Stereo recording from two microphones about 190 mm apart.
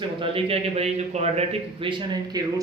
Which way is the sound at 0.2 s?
30° right (ahead or behind).